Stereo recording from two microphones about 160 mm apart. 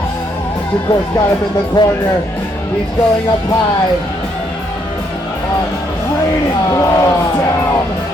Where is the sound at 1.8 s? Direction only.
30° left (ahead or behind).